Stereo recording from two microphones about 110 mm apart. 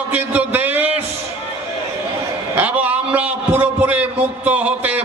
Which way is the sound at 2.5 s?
15° right (ahead or behind).